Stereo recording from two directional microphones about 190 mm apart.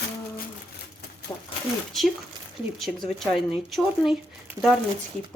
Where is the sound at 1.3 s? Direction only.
15° left (ahead or behind).